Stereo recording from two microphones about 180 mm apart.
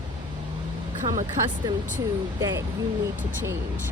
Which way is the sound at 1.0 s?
45° right (ahead or behind).